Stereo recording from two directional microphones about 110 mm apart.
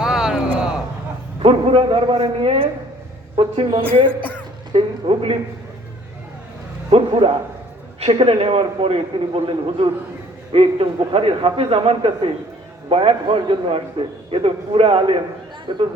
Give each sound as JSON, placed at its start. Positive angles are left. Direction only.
{"t": 0.0, "sound": "a sound", "side_deg": -5}
{"t": 1.4, "sound": "a man's voice", "side_deg": -60}
{"t": 6.9, "sound": "a man's voice", "side_deg": -55}
{"t": 15.7, "sound": "a woman's voice", "side_deg": -45}